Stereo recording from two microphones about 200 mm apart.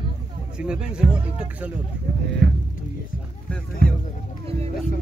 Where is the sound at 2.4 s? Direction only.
60° right (ahead or behind).